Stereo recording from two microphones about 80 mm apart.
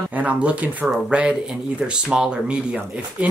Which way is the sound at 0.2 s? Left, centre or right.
Centre.